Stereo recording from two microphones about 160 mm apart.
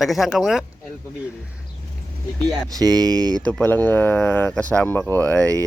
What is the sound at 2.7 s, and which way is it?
Speech, 25° right (ahead or behind).